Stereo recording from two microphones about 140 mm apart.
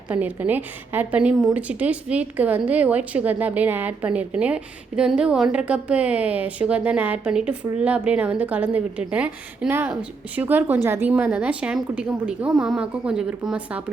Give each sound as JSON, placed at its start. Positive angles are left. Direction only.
{"t": 0.1, "sound": "a woman's voice", "side_deg": -10}